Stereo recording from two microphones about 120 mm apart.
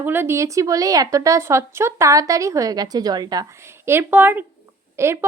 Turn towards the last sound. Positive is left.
turn(degrees=-20)  # may be behind; listen again after turning